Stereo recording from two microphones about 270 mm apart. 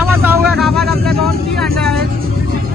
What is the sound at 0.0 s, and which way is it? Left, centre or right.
Vehicle, centre.